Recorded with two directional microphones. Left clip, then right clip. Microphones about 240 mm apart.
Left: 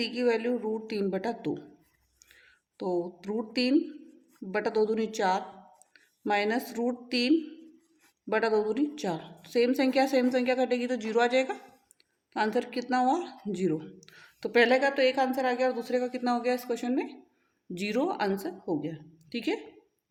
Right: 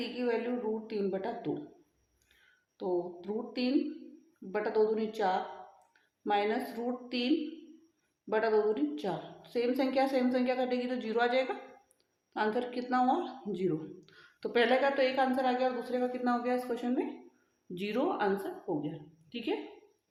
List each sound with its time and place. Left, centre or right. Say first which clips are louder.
0.0 s speech: left 6 dB; left
2.7 s speech: left 3 dB; left